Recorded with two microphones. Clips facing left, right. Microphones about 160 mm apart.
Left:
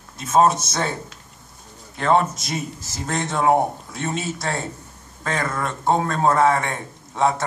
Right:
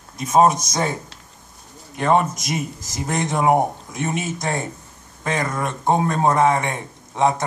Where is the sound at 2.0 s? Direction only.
15° right (ahead or behind).